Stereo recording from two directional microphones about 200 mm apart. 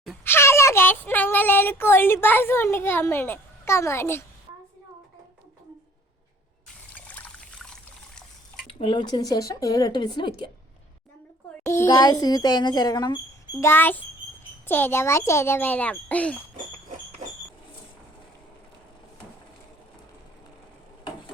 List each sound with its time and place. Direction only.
0.3 s speech: 10° left (ahead or behind)
6.9 s water: 5° left (ahead or behind)
8.6 s speech: 25° left (ahead or behind)
11.6 s a child's voice: 15° left (ahead or behind)